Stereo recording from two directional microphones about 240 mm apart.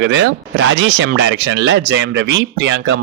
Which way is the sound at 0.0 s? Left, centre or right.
Right.